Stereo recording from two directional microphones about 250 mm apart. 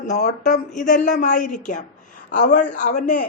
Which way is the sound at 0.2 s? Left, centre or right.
Left.